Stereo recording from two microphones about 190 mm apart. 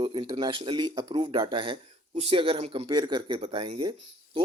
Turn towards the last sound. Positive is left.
turn(degrees=-25)  # may be behind; listen again after turning